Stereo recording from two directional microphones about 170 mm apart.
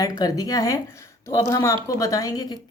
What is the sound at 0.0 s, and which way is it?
A woman's voice, 20° left (ahead or behind).